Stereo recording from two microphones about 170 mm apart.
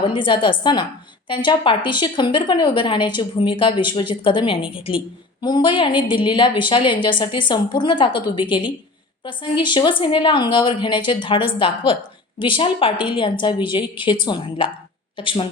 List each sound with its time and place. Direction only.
0.0 s a woman's voice: 30° left (ahead or behind)